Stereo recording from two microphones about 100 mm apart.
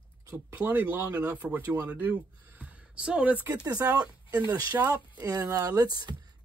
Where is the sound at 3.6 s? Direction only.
40° right (ahead or behind).